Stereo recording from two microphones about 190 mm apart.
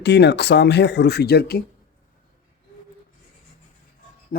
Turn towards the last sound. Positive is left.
turn(degrees=50)  # may be behind; listen again after turning